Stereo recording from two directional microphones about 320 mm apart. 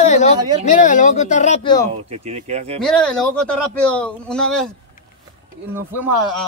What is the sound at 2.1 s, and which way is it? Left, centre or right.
Speech, centre.